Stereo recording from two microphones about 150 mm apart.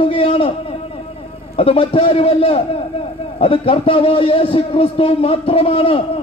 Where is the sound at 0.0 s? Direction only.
40° left (ahead or behind).